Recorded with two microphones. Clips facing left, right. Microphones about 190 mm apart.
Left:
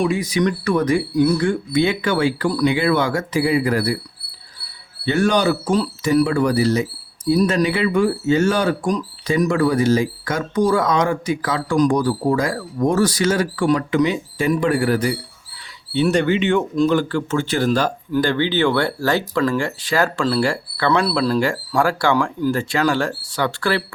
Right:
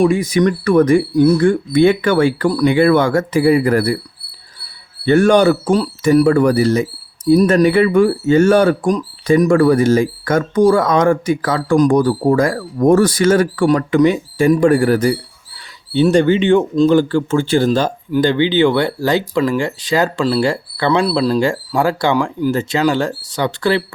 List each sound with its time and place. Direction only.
0.0 s speech: 50° right (ahead or behind)
5.0 s speech: 55° right (ahead or behind)
15.9 s speech: 30° right (ahead or behind)